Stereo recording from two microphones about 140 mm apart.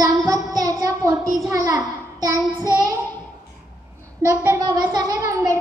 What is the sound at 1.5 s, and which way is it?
Speech, 25° right (ahead or behind).